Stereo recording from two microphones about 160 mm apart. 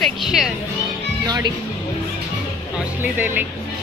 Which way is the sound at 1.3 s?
25° right (ahead or behind).